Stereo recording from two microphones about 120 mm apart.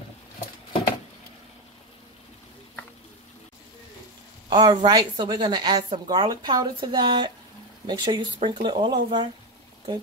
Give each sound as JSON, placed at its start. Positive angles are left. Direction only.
{"t": 4.5, "sound": "a woman's voice", "side_deg": -40}